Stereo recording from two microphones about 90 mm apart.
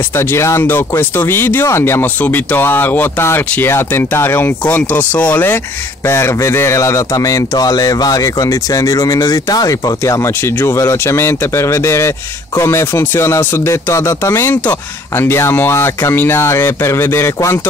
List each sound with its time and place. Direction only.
0.1 s speech: 30° left (ahead or behind)